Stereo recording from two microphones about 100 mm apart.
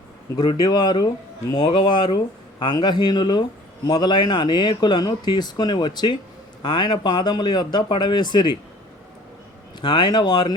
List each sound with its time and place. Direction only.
0.3 s speech: 50° left (ahead or behind)
9.8 s speech: 50° left (ahead or behind)